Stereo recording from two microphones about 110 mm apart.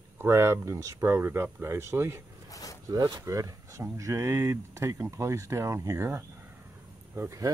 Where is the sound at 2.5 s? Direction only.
30° left (ahead or behind).